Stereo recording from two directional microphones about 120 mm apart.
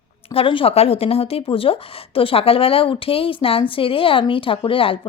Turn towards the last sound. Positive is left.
turn(degrees=50)  # may be behind; listen again after turning